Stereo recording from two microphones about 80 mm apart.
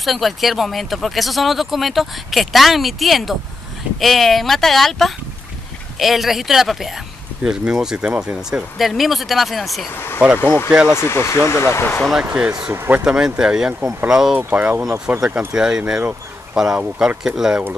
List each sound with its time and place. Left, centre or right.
0.0 s speech: centre
8.7 s speech: centre
9.9 s speech: left
10.7 s speech: centre
11.0 s speech: left
12.2 s speech: centre
12.7 s speech: right
13.0 s speech: centre
14.5 s speech: right
16.1 s a sound: centre